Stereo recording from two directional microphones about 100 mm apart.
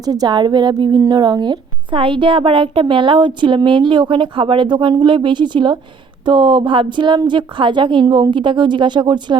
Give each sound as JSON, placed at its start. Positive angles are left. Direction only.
{"t": 0.0, "sound": "a woman's voice", "side_deg": -40}